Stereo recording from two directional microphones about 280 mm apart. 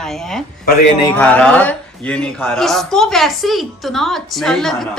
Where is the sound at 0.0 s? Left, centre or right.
Centre.